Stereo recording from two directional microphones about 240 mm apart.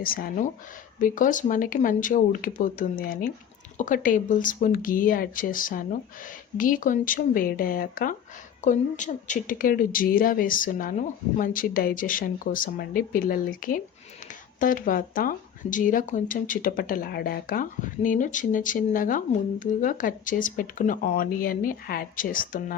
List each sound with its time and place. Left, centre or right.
0.0 s speech: left